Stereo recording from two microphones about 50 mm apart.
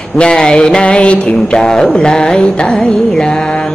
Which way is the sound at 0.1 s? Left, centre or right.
Centre.